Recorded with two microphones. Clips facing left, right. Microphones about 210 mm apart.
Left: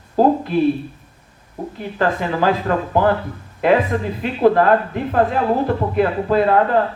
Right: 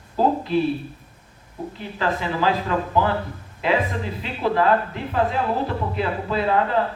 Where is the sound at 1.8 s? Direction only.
55° left (ahead or behind).